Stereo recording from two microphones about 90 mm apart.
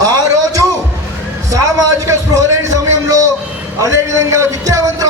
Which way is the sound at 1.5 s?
40° right (ahead or behind).